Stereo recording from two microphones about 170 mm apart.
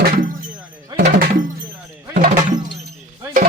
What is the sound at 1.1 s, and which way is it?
Music, 50° right (ahead or behind).